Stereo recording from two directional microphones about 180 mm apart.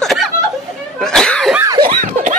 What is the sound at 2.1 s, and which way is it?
Snicker, 45° right (ahead or behind).